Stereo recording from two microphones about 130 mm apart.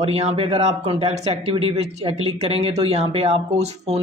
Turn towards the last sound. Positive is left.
turn(degrees=-55)  # may be behind; listen again after turning